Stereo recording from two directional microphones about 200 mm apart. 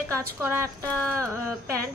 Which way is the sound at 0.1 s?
10° right (ahead or behind).